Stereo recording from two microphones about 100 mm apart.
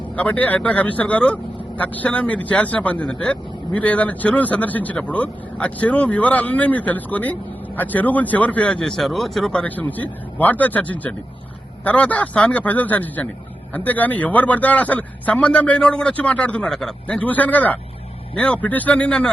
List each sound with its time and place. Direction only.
0.2 s a man's voice: 15° left (ahead or behind)